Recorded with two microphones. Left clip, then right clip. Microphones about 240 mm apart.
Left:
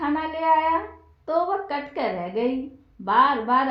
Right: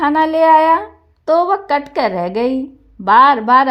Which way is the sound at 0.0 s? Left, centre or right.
Right.